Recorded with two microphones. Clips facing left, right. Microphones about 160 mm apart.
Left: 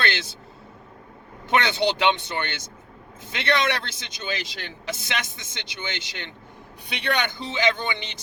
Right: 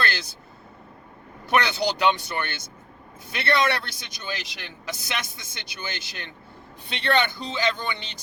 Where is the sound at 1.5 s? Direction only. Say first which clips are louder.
Left 1 dB; 25° left (ahead or behind).